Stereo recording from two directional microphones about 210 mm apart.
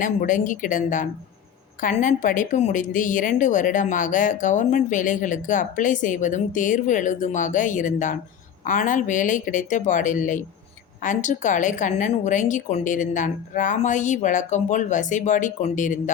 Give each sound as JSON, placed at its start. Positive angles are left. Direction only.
{"t": 0.0, "sound": "a woman's voice", "side_deg": 40}